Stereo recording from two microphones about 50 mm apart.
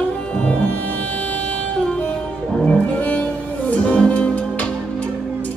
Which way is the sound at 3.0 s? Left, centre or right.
Left.